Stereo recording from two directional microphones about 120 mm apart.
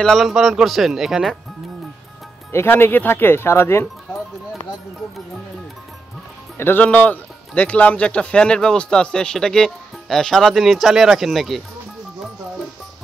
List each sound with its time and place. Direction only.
0.0 s speech: centre (ahead or behind)
2.5 s speech: 20° left (ahead or behind)
6.6 s speech: 15° left (ahead or behind); by 11.6 s centre (ahead or behind)